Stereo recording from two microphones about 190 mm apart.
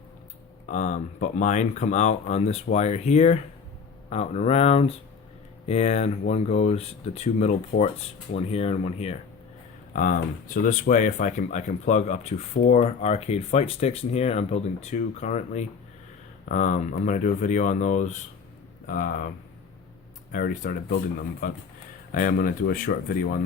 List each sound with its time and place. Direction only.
0.7 s speech: 40° left (ahead or behind)
7.7 s speech: 50° left (ahead or behind)
8.4 s speech: 30° left (ahead or behind)
9.9 s speech: 45° left (ahead or behind)
20.3 s speech: 45° left (ahead or behind)
22.1 s speech: 45° left (ahead or behind)